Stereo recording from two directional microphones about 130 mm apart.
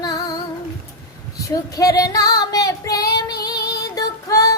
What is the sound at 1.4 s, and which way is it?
Child singing, 25° left (ahead or behind).